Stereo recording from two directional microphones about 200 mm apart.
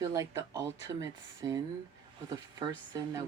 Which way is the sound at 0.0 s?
15° right (ahead or behind).